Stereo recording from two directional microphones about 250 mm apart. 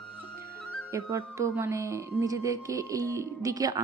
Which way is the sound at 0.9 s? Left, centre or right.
Centre.